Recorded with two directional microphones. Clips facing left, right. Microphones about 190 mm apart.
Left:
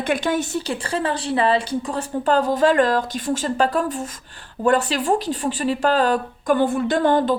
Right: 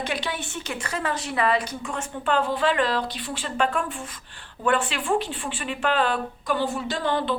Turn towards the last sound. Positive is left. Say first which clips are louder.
# left 8 dB
turn(degrees=45)  # may be behind; listen again after turning